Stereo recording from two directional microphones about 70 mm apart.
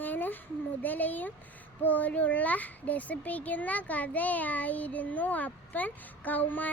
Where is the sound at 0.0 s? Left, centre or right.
Left.